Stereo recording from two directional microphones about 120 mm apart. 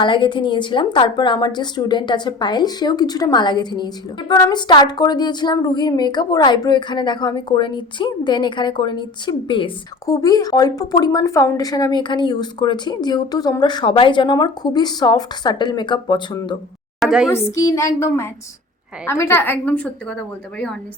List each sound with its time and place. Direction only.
0.0 s speech: 40° left (ahead or behind)
10.1 s speech: 30° left (ahead or behind)
17.0 s a woman's voice: 5° right (ahead or behind)
17.3 s a woman's voice: 25° left (ahead or behind)